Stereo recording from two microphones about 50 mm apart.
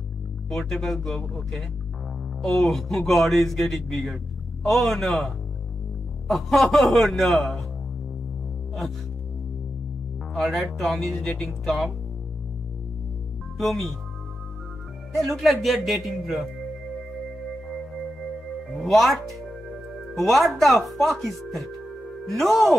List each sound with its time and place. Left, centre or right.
0.5 s speech: centre
2.4 s speech: centre
10.3 s speech: centre
11.2 s speech: centre
11.6 s speech: centre
13.6 s speech: centre
15.1 s speech: centre
17.6 s music: centre
20.2 s speech: centre